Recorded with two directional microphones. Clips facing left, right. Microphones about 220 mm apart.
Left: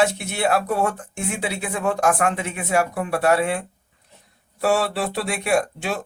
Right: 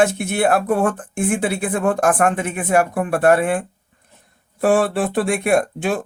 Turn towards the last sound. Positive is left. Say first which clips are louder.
# right 4 dB
turn(degrees=-50)  # may be behind; listen again after turning